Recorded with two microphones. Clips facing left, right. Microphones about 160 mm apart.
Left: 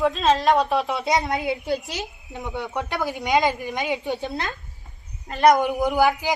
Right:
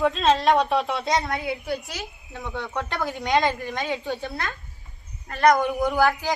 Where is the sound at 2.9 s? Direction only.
Centre (ahead or behind).